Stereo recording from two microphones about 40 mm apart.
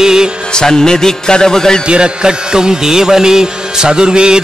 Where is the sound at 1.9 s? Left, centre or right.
Right.